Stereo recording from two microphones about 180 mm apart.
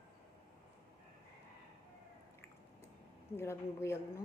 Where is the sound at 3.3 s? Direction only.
15° left (ahead or behind).